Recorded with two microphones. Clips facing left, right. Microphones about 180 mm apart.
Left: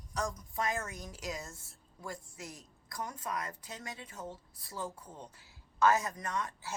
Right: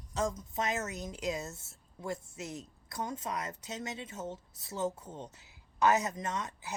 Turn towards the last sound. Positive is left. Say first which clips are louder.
# right 1 dB
turn(degrees=-20)  # may be behind; listen again after turning